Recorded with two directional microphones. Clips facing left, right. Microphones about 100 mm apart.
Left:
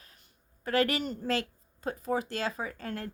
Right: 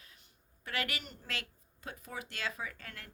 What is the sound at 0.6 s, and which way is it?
Speech, 35° left (ahead or behind).